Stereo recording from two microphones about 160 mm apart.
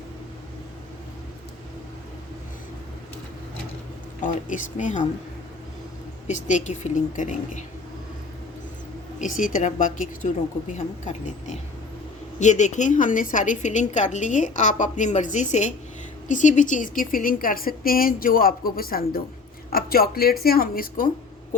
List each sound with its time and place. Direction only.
4.2 s a woman's voice: 55° left (ahead or behind)
6.2 s a woman's voice: 50° left (ahead or behind)
9.1 s a woman's voice: 55° left (ahead or behind)